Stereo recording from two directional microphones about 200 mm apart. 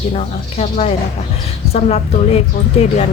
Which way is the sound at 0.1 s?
35° left (ahead or behind).